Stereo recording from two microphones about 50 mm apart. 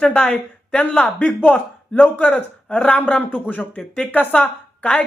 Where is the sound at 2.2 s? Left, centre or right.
Centre.